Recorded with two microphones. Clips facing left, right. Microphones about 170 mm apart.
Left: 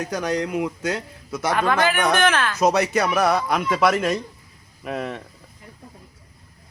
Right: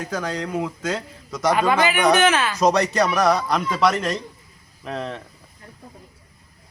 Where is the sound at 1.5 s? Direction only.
10° right (ahead or behind).